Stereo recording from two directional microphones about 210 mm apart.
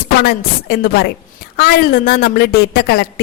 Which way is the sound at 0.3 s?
50° left (ahead or behind).